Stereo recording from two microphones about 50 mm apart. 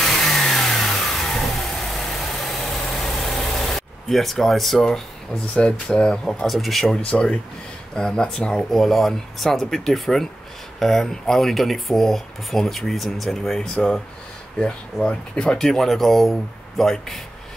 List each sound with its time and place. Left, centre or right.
0.0 s vehicle: centre
5.5 s speech: left
6.2 s speech: centre
7.1 s speech: left
8.7 s speech: centre